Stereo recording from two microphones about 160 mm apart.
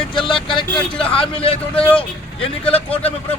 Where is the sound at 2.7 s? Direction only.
35° left (ahead or behind).